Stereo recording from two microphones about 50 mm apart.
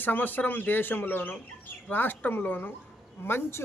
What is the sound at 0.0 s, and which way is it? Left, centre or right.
A man's voice, left.